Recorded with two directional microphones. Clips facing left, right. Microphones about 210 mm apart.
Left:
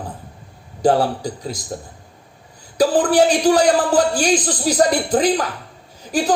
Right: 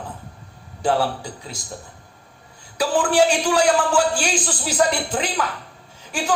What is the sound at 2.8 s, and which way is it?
Speech, 35° left (ahead or behind).